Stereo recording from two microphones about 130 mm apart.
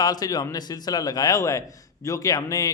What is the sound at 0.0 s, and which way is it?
A man's voice, 30° left (ahead or behind).